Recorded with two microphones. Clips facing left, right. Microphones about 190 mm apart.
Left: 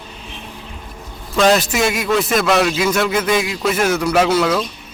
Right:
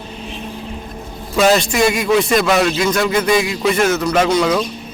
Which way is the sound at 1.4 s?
Centre (ahead or behind).